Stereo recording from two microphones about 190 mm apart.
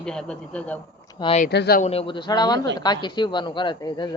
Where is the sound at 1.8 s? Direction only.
30° left (ahead or behind).